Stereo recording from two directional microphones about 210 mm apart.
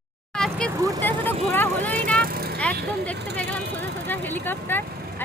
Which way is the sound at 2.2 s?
45° right (ahead or behind).